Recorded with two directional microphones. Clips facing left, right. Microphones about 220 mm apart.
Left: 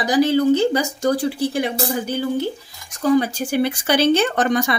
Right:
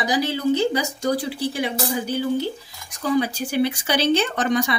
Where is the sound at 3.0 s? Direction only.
45° left (ahead or behind).